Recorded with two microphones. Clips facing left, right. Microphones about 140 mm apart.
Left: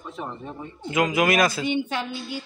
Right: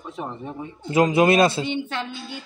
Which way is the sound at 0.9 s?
30° right (ahead or behind).